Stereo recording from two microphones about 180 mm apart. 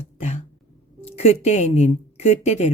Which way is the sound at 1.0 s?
35° left (ahead or behind).